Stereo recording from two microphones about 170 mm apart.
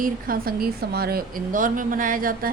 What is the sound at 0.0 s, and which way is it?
A woman's voice, 60° right (ahead or behind).